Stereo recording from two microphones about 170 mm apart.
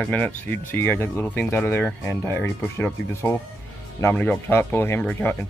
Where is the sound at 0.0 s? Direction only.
5° left (ahead or behind).